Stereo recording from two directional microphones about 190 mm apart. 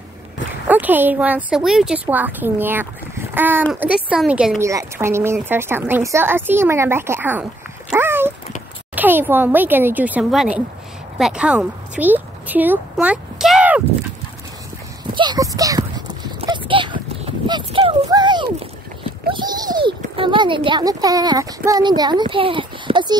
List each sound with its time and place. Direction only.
0.7 s speech: 10° right (ahead or behind)
4.6 s speech: 15° right (ahead or behind)
7.9 s dog: 10° right (ahead or behind)
8.9 s a woman's voice: 10° right (ahead or behind)
15.1 s clip-clop: 20° right (ahead or behind)
19.2 s a sound: 25° right (ahead or behind)
21.6 s a child's voice: 20° right (ahead or behind)